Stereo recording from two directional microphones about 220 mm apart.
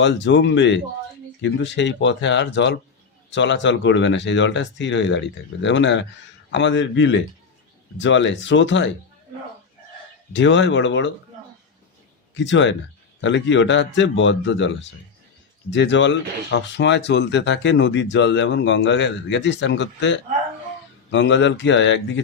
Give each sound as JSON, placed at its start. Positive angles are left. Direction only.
{"t": 0.0, "sound": "speech", "side_deg": 55}
{"t": 10.3, "sound": "speech", "side_deg": 55}
{"t": 12.3, "sound": "speech", "side_deg": 55}